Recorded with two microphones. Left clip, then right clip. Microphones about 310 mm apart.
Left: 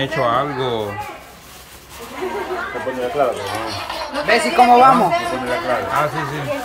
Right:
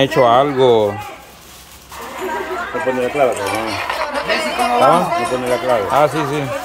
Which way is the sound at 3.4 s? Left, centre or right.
Centre.